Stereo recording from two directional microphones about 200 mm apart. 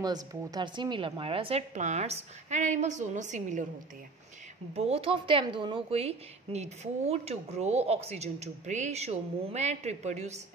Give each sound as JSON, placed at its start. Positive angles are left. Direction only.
{"t": 0.0, "sound": "a woman's voice", "side_deg": -20}
{"t": 4.7, "sound": "a woman's voice", "side_deg": -30}